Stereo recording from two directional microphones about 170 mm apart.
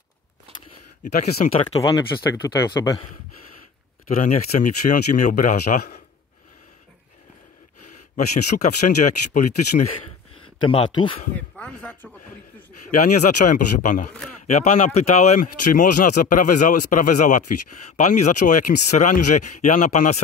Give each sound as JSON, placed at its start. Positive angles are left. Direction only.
{"t": 1.0, "sound": "speech", "side_deg": 40}
{"t": 2.4, "sound": "speech", "side_deg": 20}
{"t": 4.2, "sound": "speech", "side_deg": 45}
{"t": 8.6, "sound": "speech", "side_deg": 50}
{"t": 10.7, "sound": "speech", "side_deg": 30}
{"t": 11.3, "sound": "speech", "side_deg": 5}
{"t": 12.9, "sound": "speech", "side_deg": 50}